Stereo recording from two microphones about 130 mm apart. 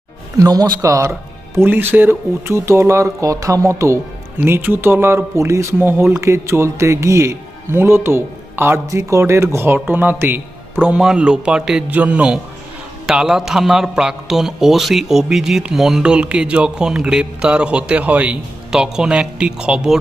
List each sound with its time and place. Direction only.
0.3 s a man's voice: 30° right (ahead or behind); by 20.0 s 5° right (ahead or behind)